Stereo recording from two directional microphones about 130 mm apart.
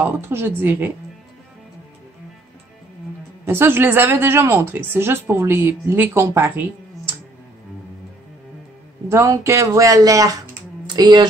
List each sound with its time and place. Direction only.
0.0 s speech: 20° right (ahead or behind)
3.4 s speech: 20° right (ahead or behind)
9.1 s speech: 25° right (ahead or behind)